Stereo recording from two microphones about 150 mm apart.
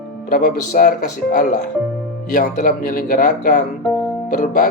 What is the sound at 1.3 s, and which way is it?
Speech, 60° left (ahead or behind).